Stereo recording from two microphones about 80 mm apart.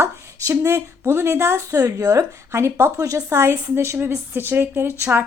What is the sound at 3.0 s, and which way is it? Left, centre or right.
Speech, right.